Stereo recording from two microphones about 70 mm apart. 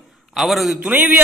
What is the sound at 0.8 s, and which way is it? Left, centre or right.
Speech, right.